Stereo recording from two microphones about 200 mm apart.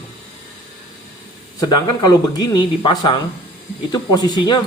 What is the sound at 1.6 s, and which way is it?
Speech, 20° left (ahead or behind).